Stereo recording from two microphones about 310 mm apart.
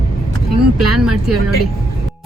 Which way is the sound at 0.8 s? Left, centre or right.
Right.